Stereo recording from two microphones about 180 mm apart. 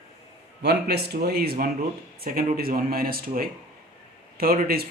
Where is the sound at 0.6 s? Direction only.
65° right (ahead or behind).